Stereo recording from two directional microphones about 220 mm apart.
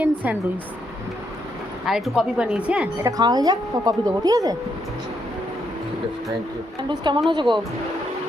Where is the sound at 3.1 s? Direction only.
20° right (ahead or behind).